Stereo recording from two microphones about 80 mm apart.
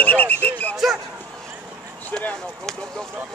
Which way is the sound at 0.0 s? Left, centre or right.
Left.